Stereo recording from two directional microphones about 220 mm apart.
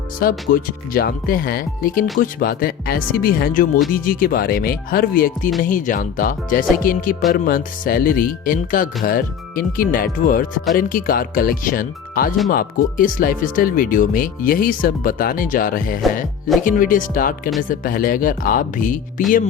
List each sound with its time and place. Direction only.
0.2 s speech: 40° left (ahead or behind)